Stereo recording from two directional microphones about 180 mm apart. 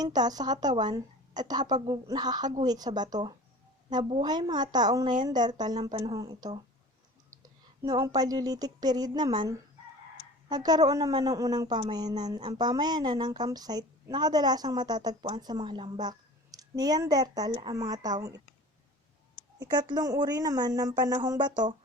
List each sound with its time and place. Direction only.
0.0 s speech: 20° right (ahead or behind)
7.9 s speech: 15° right (ahead or behind)
19.7 s speech: 25° right (ahead or behind)